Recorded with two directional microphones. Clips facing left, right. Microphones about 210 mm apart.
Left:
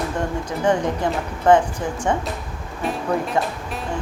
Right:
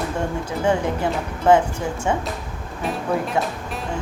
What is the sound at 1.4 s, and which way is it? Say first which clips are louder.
Speech: even; 10° right (ahead or behind).